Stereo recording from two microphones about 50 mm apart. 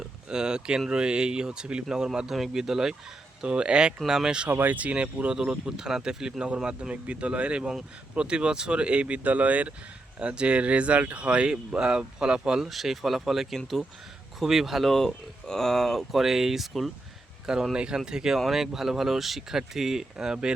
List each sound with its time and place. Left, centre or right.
0.0 s speech: centre
3.4 s speech: right
4.4 s speech: right; by 14.9 s centre
14.9 s speech: centre